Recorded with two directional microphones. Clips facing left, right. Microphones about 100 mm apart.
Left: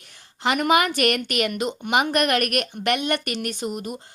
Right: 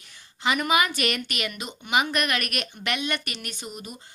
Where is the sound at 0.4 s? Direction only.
60° left (ahead or behind).